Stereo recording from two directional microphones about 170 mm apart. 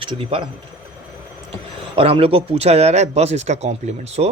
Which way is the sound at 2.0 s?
35° right (ahead or behind).